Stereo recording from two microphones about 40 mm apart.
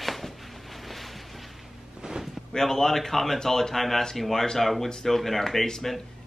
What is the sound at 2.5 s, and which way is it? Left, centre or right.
Speech, centre.